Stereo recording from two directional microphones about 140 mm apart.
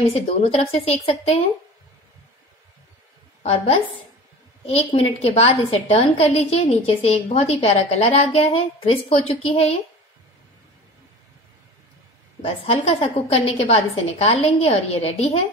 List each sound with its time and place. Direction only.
0.1 s a woman's voice: 50° left (ahead or behind)
3.4 s a woman's voice: 40° left (ahead or behind)
12.4 s a woman's voice: 45° left (ahead or behind)